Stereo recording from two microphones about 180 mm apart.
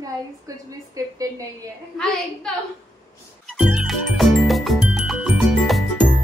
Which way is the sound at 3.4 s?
Centre (ahead or behind).